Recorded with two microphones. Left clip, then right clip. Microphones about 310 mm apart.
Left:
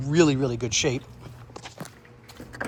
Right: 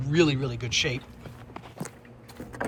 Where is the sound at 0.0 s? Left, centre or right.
Centre.